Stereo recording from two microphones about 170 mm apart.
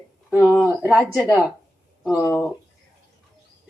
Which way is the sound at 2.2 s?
20° left (ahead or behind).